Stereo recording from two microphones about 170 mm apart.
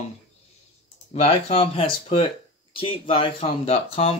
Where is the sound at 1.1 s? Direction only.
35° left (ahead or behind).